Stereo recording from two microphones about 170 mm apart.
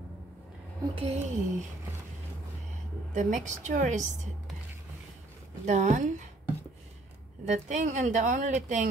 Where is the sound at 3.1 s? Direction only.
45° right (ahead or behind).